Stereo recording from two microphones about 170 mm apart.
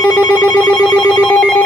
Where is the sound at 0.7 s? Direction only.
5° left (ahead or behind).